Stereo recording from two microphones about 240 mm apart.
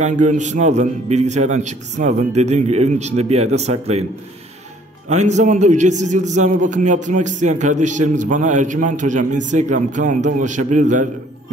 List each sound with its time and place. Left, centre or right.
0.0 s a man's voice: right
5.1 s a man's voice: right